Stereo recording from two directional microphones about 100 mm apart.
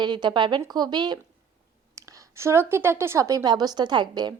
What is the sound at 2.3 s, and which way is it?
A woman's voice, 25° right (ahead or behind).